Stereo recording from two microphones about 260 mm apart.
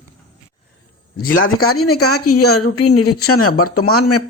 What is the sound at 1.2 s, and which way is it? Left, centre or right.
Speech, left.